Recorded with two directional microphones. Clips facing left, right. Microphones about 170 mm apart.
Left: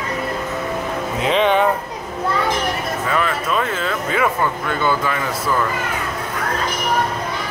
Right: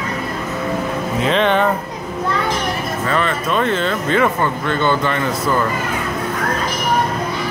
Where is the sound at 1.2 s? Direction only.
10° left (ahead or behind).